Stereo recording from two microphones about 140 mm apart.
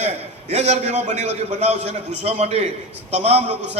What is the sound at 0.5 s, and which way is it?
A man's voice, 50° right (ahead or behind).